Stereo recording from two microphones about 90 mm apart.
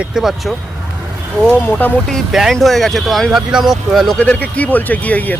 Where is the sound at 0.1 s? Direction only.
5° right (ahead or behind).